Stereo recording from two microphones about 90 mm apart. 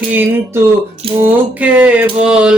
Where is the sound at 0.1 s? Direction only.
20° right (ahead or behind).